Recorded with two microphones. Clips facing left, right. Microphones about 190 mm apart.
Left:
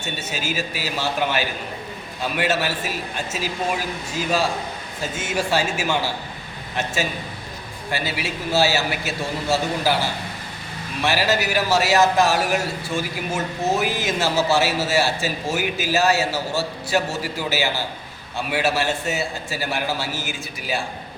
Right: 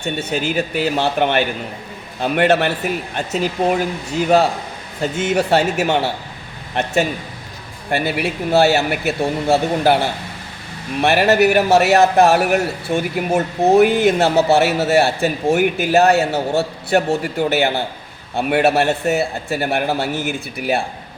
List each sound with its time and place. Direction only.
0.0 s a man's voice: 60° right (ahead or behind)
5.1 s a man's voice: 65° right (ahead or behind)